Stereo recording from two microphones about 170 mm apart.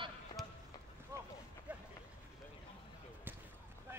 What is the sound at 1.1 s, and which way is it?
Boat, 15° right (ahead or behind).